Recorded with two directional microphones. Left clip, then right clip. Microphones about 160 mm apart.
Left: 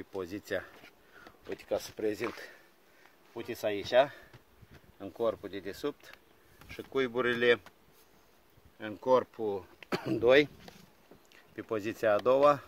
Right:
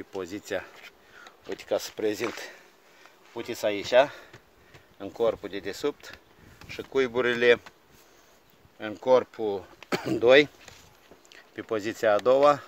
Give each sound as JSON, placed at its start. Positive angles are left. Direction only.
{"t": 0.2, "sound": "speech", "side_deg": 5}
{"t": 1.5, "sound": "speech", "side_deg": -35}
{"t": 3.3, "sound": "speech", "side_deg": -35}
{"t": 8.7, "sound": "speech", "side_deg": -35}
{"t": 11.2, "sound": "speech", "side_deg": -10}